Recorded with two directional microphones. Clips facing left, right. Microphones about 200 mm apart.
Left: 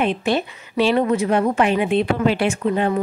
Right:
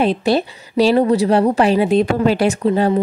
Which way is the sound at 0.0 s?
35° right (ahead or behind).